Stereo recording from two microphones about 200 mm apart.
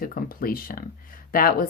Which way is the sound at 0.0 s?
45° left (ahead or behind).